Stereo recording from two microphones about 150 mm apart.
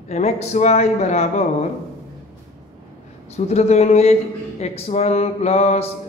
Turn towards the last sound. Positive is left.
turn(degrees=45)  # may be behind; listen again after turning